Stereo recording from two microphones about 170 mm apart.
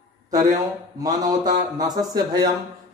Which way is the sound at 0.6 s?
20° right (ahead or behind).